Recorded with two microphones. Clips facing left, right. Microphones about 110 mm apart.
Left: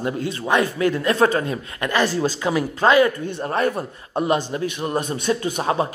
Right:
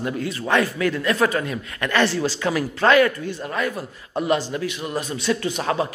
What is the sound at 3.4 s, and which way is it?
Speech, 35° left (ahead or behind).